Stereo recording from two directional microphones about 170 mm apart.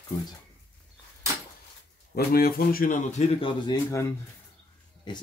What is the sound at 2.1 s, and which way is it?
Speech, 60° left (ahead or behind).